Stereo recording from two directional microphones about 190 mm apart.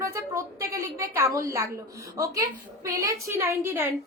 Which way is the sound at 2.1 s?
15° right (ahead or behind).